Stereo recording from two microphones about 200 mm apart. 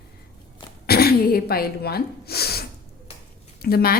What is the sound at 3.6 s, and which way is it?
Speech, 50° left (ahead or behind).